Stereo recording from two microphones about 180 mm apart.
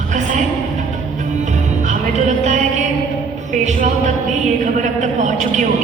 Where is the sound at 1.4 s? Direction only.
40° right (ahead or behind).